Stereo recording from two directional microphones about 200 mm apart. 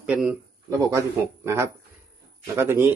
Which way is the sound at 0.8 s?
15° right (ahead or behind).